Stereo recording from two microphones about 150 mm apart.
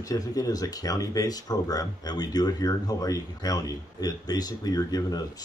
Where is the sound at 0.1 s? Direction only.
25° left (ahead or behind).